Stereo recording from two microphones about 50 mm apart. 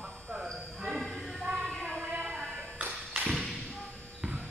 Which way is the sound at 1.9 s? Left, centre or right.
Right.